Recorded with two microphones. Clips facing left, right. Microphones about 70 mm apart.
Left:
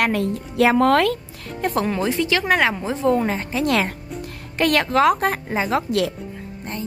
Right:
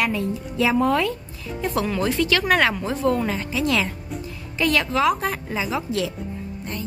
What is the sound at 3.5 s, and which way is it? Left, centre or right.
A woman's voice, left.